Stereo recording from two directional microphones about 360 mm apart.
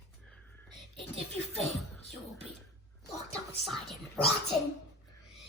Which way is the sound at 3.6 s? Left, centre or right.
Centre.